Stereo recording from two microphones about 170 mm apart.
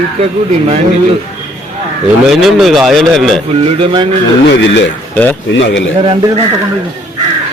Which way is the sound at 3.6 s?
30° right (ahead or behind).